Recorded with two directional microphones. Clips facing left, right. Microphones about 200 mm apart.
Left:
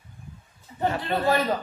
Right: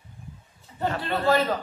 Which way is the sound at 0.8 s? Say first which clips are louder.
Left 2 dB; 15° left (ahead or behind).